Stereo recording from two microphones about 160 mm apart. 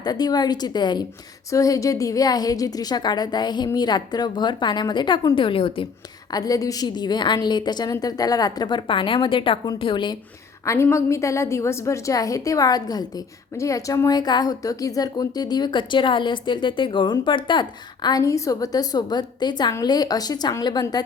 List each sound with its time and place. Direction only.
0.0 s a woman's voice: 25° left (ahead or behind)
6.3 s a woman's voice: 25° left (ahead or behind)
10.7 s a woman's voice: 15° left (ahead or behind)